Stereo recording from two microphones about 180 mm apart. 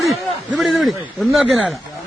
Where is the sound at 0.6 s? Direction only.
Centre (ahead or behind).